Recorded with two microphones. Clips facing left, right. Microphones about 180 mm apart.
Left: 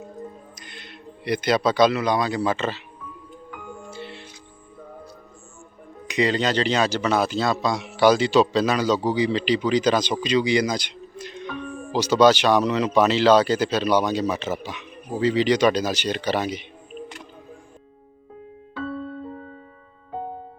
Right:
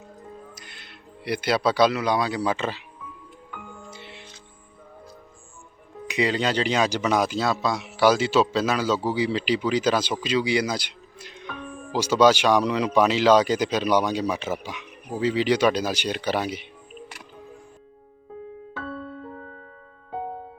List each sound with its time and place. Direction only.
0.5 s speech: 5° right (ahead or behind)
3.8 s music: 20° right (ahead or behind)
6.1 s speech: 10° right (ahead or behind)